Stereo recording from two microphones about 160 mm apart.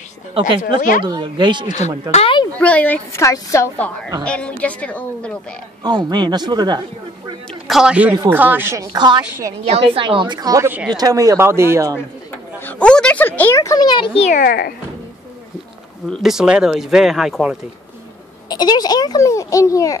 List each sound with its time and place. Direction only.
0.7 s a woman's voice: 60° left (ahead or behind)
1.0 s speech: 30° right (ahead or behind)
2.0 s speech: 45° left (ahead or behind)
2.6 s a woman's voice: 10° left (ahead or behind)
5.9 s speech: 25° right (ahead or behind)
7.6 s a woman's voice: 5° right (ahead or behind); by 9.2 s 25° right (ahead or behind)
9.7 s a woman's voice: 35° right (ahead or behind); by 11.9 s 15° right (ahead or behind)
12.5 s speech: 10° left (ahead or behind); by 14.3 s 35° left (ahead or behind)
14.3 s a child's voice: 65° left (ahead or behind)
16.1 s speech: centre (ahead or behind)
18.5 s a child's voice: 25° left (ahead or behind)